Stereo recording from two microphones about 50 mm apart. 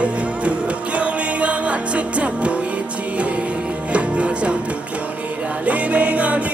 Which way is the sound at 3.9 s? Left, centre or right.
Right.